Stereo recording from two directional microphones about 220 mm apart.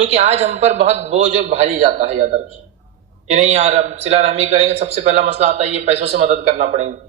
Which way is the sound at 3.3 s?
30° right (ahead or behind).